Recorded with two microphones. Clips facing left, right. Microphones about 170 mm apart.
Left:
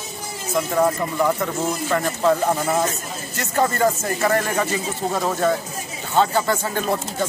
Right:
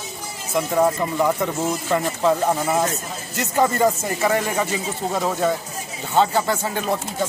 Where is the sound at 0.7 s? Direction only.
10° right (ahead or behind).